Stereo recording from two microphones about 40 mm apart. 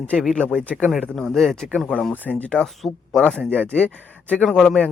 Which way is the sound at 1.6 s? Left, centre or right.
Left.